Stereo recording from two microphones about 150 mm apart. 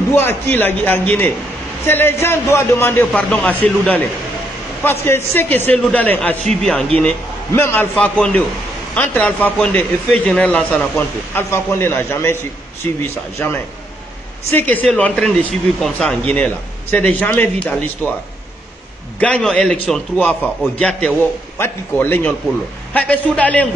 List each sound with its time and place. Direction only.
0.1 s a man's voice: 15° left (ahead or behind)
19.1 s a man's voice: 10° left (ahead or behind)